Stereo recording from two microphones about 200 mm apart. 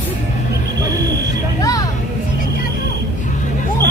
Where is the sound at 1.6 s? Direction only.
15° left (ahead or behind).